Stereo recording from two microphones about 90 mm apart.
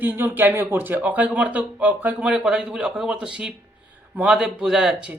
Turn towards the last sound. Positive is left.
turn(degrees=-5)  # may be behind; listen again after turning